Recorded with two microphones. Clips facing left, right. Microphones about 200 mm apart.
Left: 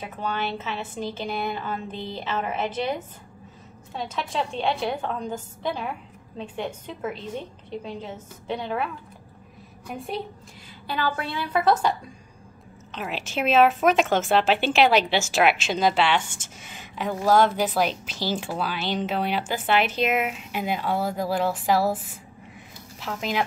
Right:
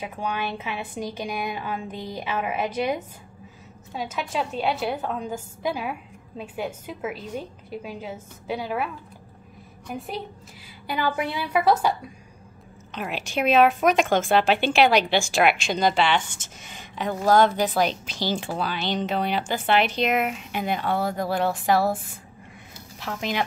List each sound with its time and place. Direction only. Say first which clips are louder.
0.0 s a woman's voice: even; 10° right (ahead or behind)
9.8 s a woman's voice: left 1 dB; centre (ahead or behind)
10.9 s a woman's voice: right 2 dB; 15° right (ahead or behind)
12.9 s a woman's voice: right 1 dB; centre (ahead or behind)